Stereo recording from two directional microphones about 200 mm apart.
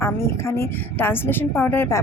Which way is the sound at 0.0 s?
15° left (ahead or behind).